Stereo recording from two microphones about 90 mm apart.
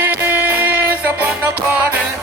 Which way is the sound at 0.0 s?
20° right (ahead or behind).